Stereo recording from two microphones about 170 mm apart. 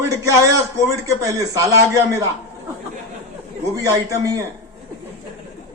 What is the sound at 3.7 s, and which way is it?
Speech, 20° right (ahead or behind).